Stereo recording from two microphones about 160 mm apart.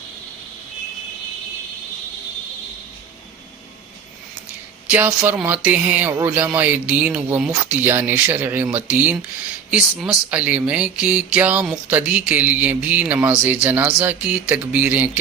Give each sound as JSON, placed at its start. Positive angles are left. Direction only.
{"t": 4.9, "sound": "speech", "side_deg": -10}